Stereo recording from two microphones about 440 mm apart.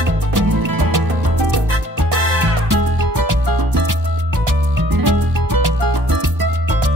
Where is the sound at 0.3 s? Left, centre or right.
Right.